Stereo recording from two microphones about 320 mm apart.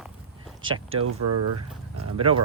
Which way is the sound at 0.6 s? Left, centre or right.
Right.